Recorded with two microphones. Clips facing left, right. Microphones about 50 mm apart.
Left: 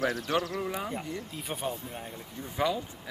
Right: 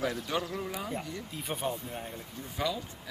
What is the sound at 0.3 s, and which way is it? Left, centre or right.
Speech, left.